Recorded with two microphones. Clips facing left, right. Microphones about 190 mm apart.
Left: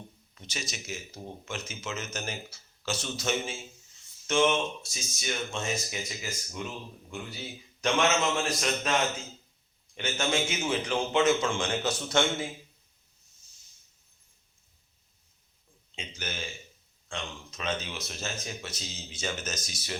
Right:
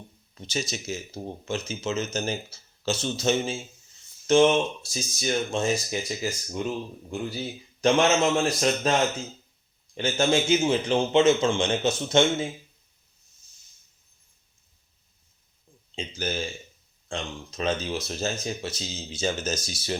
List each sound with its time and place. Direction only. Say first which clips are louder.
0.3 s a man's voice: right 8 dB; 30° right (ahead or behind)
16.0 s speech: right 8 dB; 30° right (ahead or behind)